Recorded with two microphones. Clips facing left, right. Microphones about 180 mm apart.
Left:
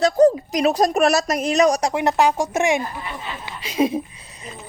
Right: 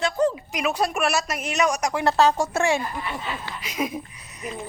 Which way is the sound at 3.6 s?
30° left (ahead or behind).